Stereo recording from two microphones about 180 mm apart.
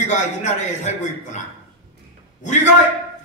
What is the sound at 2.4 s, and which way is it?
Speech, 45° left (ahead or behind).